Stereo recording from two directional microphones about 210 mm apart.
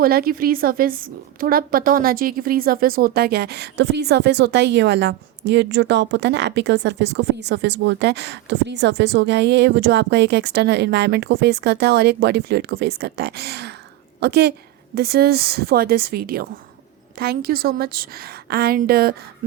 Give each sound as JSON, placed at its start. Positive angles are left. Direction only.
{"t": 0.0, "sound": "a woman's voice", "side_deg": -45}